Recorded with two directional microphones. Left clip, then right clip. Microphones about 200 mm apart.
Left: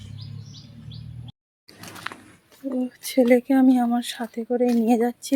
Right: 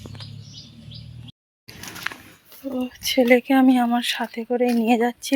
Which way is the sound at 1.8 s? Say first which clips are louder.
Right 4 dB; 5° right (ahead or behind).